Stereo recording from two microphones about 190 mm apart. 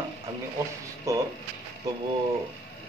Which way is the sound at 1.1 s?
15° right (ahead or behind).